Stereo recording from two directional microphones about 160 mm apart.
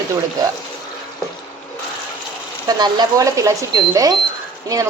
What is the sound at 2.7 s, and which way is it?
Speech, 25° right (ahead or behind).